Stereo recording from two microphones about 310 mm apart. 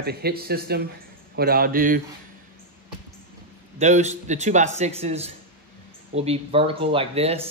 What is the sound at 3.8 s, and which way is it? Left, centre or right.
Speech, right.